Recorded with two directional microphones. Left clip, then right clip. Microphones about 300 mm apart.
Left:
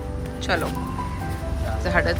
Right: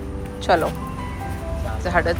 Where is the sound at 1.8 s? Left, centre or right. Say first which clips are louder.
Right 2 dB; centre.